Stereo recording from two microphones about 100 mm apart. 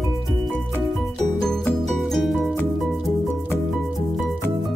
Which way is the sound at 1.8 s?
Centre (ahead or behind).